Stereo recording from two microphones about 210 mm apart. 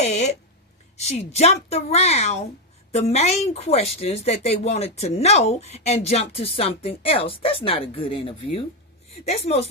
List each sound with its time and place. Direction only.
0.0 s a woman's voice: 30° left (ahead or behind)